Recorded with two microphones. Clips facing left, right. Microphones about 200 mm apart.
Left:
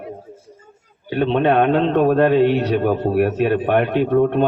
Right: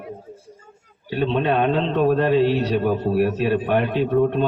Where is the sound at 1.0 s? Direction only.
55° left (ahead or behind).